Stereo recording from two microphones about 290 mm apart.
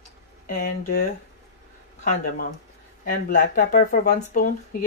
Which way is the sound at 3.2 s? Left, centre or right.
Left.